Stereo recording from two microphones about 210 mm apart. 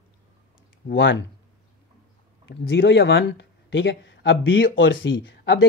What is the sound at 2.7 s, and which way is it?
Speech, 55° left (ahead or behind).